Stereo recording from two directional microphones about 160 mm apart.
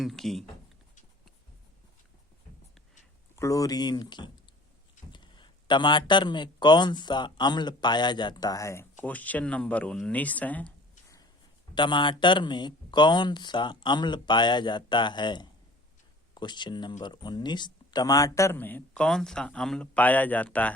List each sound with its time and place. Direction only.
0.0 s speech: centre (ahead or behind)
3.3 s speech: 20° left (ahead or behind)
11.7 s speech: 30° left (ahead or behind); by 20.7 s 10° left (ahead or behind)